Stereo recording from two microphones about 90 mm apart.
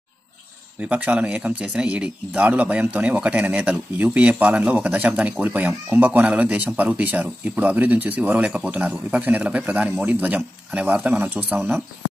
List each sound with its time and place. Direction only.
0.7 s speech: 15° right (ahead or behind)